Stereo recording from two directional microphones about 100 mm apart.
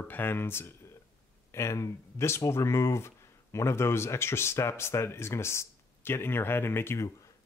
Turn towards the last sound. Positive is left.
turn(degrees=25)  # may be behind; listen again after turning